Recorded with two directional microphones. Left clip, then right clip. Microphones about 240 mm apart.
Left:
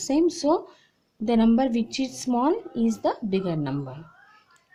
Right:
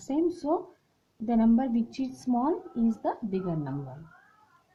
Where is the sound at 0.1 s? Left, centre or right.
Left.